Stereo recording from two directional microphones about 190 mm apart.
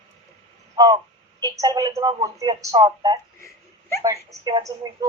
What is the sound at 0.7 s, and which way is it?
Crow, 25° right (ahead or behind).